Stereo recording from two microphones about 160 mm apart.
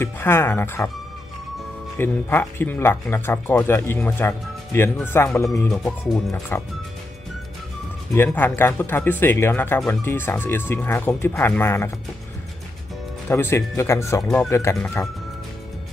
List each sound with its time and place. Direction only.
0.0 s speech: 15° left (ahead or behind)
2.0 s speech: 15° left (ahead or behind)
5.7 s speech: 5° left (ahead or behind)
6.5 s speech: 15° left (ahead or behind)
8.3 s speech: 10° left (ahead or behind)
13.3 s speech: 15° left (ahead or behind)
14.2 s speech: 5° left (ahead or behind)
14.5 s speech: 15° left (ahead or behind)